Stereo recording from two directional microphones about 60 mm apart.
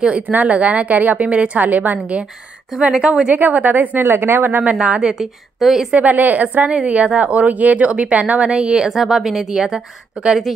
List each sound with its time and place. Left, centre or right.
0.3 s a woman's voice: right
4.8 s a woman's voice: right
5.2 s a woman's voice: centre
5.9 s a woman's voice: right; by 9.8 s centre